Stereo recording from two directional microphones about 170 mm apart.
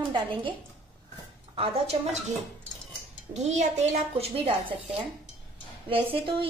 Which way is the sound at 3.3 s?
40° right (ahead or behind).